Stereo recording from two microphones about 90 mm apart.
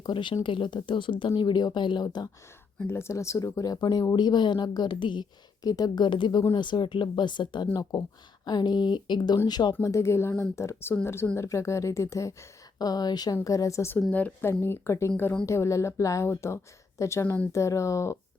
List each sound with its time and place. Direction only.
0.0 s speech: 60° left (ahead or behind)
1.4 s speech: 55° left (ahead or behind)
2.8 s speech: 30° left (ahead or behind); by 5.2 s 60° left (ahead or behind)
5.6 s speech: 45° left (ahead or behind)
9.8 s a woman's voice: 30° left (ahead or behind)
14.1 s a woman's voice: 15° left (ahead or behind)
14.6 s speech: 30° left (ahead or behind)